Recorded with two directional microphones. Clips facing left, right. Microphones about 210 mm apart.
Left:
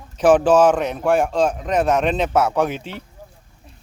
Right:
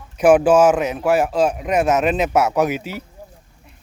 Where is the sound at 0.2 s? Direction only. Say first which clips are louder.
Right 1 dB; 10° right (ahead or behind).